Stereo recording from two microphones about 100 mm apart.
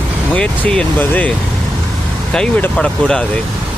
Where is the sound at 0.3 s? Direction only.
10° left (ahead or behind).